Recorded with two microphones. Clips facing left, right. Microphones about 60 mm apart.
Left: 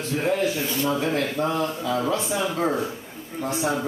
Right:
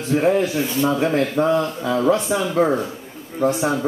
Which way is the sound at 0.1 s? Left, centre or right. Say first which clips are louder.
Right 6 dB; right.